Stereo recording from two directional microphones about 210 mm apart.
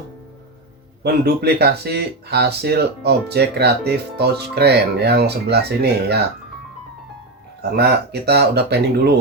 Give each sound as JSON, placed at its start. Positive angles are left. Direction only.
{"t": 1.0, "sound": "speech", "side_deg": -50}
{"t": 7.6, "sound": "speech", "side_deg": -50}